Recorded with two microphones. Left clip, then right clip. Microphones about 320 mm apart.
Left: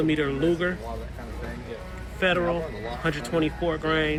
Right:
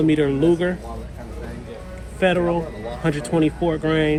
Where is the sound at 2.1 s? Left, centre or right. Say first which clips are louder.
Right 5 dB; centre.